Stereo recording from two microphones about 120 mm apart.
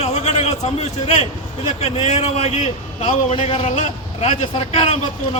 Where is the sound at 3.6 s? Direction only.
90° left.